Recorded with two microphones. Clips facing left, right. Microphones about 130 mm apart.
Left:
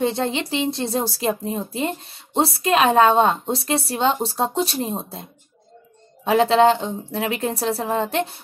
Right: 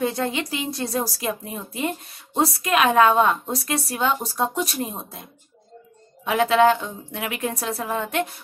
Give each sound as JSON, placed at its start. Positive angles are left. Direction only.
{"t": 0.0, "sound": "a woman's voice", "side_deg": 25}